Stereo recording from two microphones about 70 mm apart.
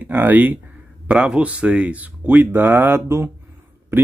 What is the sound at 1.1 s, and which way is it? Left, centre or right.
Speech, centre.